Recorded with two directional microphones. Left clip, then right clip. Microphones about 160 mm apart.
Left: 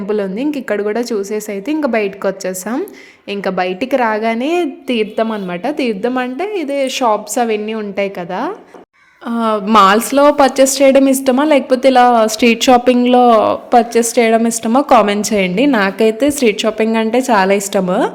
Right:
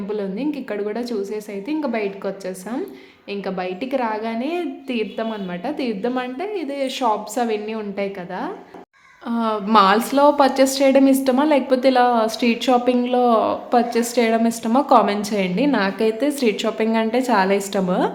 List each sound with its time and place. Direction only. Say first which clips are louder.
0.1 s a woman's voice: left 8 dB; 50° left (ahead or behind); by 18.1 s 35° left (ahead or behind)